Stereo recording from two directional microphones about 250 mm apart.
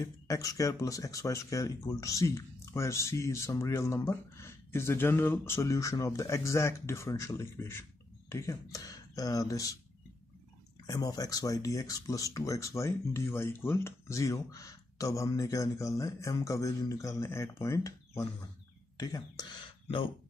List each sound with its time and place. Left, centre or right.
0.0 s speech: centre
10.9 s speech: centre